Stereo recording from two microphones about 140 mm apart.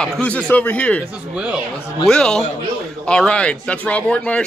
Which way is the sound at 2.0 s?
5° left (ahead or behind).